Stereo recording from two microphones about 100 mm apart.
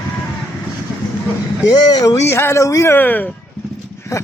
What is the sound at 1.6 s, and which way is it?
Speech, 40° left (ahead or behind).